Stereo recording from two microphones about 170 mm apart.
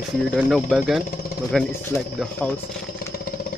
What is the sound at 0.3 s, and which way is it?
Speech, centre (ahead or behind).